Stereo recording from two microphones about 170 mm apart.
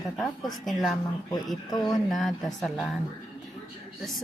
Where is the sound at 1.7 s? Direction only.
20° left (ahead or behind).